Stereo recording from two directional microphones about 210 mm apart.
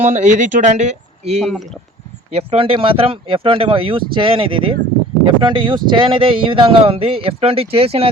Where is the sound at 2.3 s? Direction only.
30° right (ahead or behind).